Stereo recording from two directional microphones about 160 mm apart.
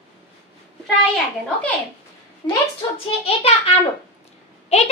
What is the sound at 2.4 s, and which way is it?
A child's voice, 35° left (ahead or behind).